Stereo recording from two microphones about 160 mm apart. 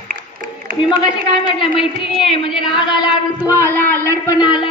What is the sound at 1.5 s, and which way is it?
Speech, 35° left (ahead or behind).